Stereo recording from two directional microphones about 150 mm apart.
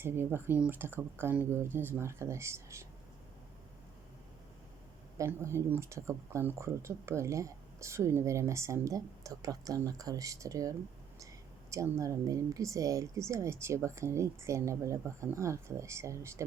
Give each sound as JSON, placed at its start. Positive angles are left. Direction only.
{"t": 0.0, "sound": "speech", "side_deg": -15}
{"t": 5.1, "sound": "speech", "side_deg": -20}